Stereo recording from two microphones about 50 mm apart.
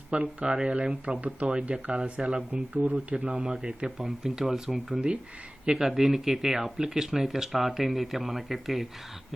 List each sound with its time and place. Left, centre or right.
0.1 s speech: right
2.7 s speech: right; by 4.9 s centre
4.9 s speech: centre
5.7 s speech: centre